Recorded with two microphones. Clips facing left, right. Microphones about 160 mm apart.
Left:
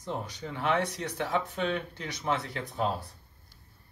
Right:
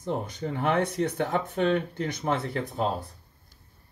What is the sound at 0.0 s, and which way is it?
Speech, 50° right (ahead or behind).